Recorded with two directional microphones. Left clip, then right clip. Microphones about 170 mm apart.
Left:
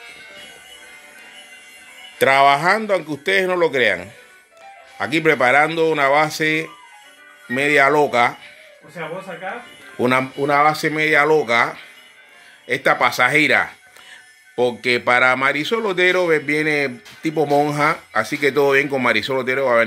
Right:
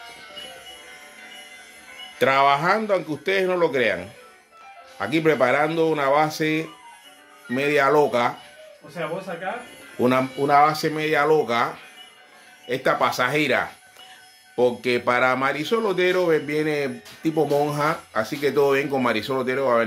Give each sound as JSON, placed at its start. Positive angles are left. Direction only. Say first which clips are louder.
{"t": 2.1, "sound": "speech", "louder": "left 4 dB", "side_deg": 40}
{"t": 9.9, "sound": "speech", "louder": "left 3 dB", "side_deg": 40}